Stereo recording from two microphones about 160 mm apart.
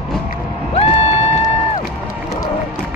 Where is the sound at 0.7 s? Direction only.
40° left (ahead or behind).